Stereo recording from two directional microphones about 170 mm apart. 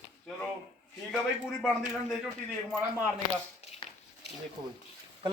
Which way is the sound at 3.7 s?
35° left (ahead or behind).